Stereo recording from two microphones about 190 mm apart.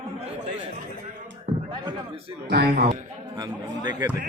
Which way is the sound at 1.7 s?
25° right (ahead or behind).